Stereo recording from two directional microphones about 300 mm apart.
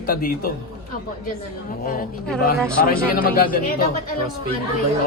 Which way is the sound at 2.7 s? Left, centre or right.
Left.